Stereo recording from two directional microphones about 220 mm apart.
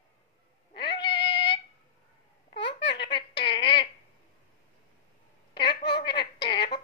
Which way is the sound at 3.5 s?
50° left (ahead or behind).